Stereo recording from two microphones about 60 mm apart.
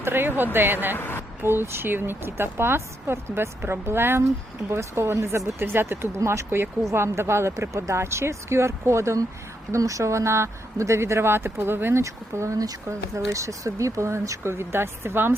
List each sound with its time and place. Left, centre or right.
0.0 s speech: right
0.9 s a woman's voice: left
1.4 s speech: right
6.1 s speech: right
12.0 s speech: right